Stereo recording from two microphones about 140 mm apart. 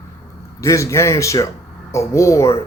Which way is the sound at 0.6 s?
20° left (ahead or behind).